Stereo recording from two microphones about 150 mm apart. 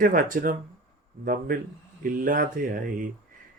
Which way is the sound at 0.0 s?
65° right (ahead or behind).